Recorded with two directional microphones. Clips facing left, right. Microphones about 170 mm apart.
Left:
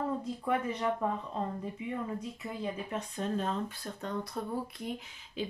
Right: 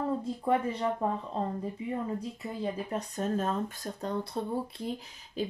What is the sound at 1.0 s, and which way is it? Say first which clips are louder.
Speech: right 2 dB; 35° right (ahead or behind).